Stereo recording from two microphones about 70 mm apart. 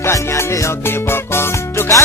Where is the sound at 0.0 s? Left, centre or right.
Left.